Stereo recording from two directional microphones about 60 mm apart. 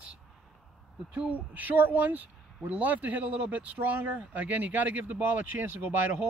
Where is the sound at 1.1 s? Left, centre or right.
Right.